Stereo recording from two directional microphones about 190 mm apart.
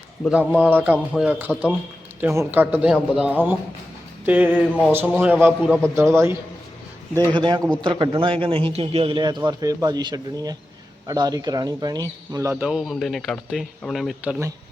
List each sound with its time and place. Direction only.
0.3 s a man's voice: 10° right (ahead or behind)
6.0 s speech: 15° right (ahead or behind)
7.3 s a man's voice: 25° right (ahead or behind); by 14.3 s centre (ahead or behind)